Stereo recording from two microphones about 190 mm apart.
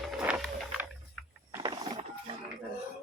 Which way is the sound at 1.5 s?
20° right (ahead or behind).